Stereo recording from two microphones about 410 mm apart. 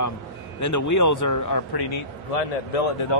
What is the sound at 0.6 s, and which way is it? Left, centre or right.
Speech, left.